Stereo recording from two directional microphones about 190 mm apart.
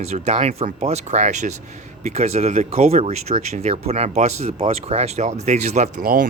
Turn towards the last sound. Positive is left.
turn(degrees=-50)  # may be behind; listen again after turning